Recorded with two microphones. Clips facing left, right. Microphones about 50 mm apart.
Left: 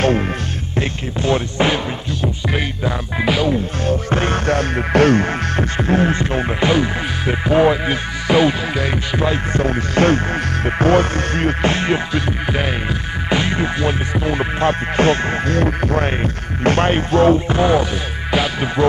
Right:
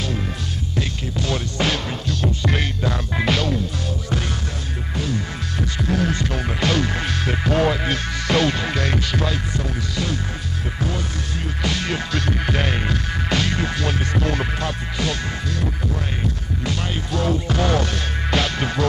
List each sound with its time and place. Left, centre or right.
0.7 s speech: left
2.2 s music: centre
3.8 s music: left
4.5 s music: left
5.6 s music: left
6.7 s music: centre
9.5 s music: left
11.6 s music: left
14.6 s music: left
17.6 s music: centre